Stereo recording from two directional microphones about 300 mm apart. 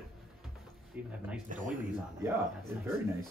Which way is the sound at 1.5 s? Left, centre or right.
Right.